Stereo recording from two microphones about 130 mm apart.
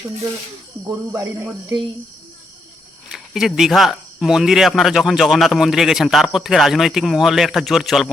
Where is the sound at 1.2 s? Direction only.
25° right (ahead or behind).